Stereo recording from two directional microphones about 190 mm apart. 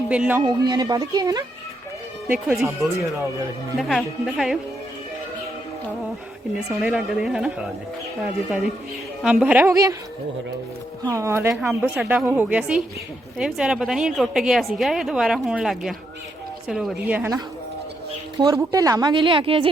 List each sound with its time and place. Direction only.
0.1 s a woman's voice: 10° right (ahead or behind)
0.4 s a woman's voice: 20° right (ahead or behind)
2.2 s a woman's voice: 5° right (ahead or behind)
6.7 s a woman's voice: 5° right (ahead or behind)
11.0 s a woman's voice: 15° right (ahead or behind)
18.3 s a woman's voice: 20° right (ahead or behind)